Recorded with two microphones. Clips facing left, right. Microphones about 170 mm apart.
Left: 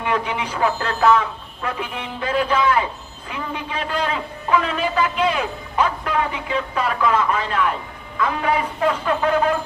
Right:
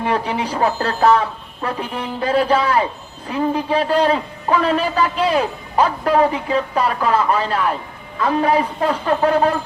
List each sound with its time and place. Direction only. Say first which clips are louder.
0.0 s a man's voice: right 3 dB; 35° right (ahead or behind)